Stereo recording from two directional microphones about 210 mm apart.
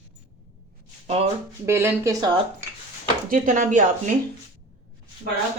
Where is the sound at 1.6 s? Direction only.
10° right (ahead or behind).